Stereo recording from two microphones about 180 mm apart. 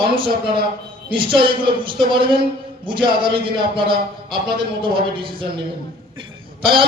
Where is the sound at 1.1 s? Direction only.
30° right (ahead or behind).